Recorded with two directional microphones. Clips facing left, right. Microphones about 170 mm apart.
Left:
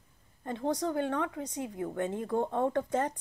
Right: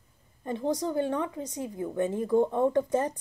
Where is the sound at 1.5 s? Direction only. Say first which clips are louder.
Right 2 dB; 15° left (ahead or behind).